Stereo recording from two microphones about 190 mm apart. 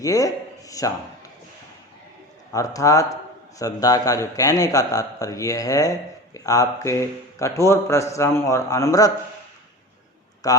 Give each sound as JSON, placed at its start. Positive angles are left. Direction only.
{"t": 0.0, "sound": "speech", "side_deg": 20}
{"t": 2.5, "sound": "a man's voice", "side_deg": 15}
{"t": 10.4, "sound": "speech", "side_deg": 20}